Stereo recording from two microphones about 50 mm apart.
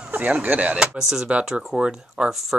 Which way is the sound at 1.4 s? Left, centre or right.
Centre.